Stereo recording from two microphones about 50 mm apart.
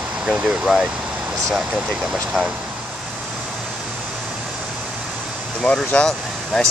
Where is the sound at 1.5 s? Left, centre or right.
Centre.